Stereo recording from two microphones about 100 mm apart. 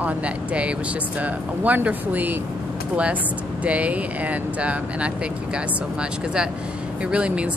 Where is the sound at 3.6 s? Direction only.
10° right (ahead or behind).